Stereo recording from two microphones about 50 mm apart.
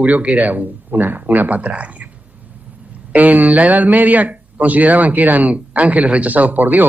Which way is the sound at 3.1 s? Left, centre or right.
Right.